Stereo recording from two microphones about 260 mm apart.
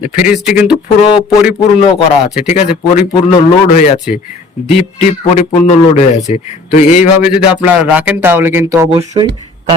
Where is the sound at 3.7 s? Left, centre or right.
Left.